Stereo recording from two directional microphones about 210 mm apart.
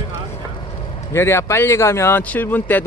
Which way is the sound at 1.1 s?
15° left (ahead or behind).